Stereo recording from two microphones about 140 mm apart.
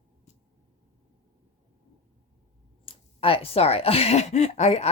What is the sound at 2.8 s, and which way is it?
Speech, 40° left (ahead or behind).